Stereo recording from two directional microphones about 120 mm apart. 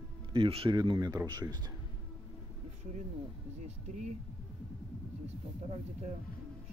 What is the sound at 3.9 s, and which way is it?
Speech, 90° right.